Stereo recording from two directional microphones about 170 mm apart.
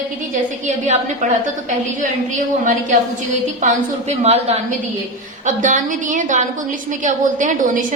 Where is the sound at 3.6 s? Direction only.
40° right (ahead or behind).